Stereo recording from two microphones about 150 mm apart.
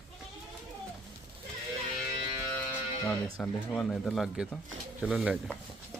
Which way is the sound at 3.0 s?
15° left (ahead or behind).